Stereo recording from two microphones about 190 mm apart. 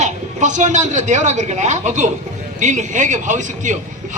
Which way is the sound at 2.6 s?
40° right (ahead or behind).